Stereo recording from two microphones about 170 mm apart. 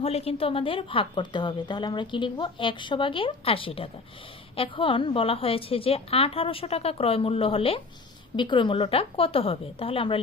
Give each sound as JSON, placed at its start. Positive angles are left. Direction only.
{"t": 0.0, "sound": "a woman's voice", "side_deg": 35}